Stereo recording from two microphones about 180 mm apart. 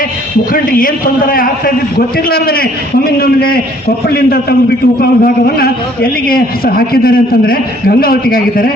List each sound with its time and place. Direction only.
0.5 s a man's voice: 50° left (ahead or behind)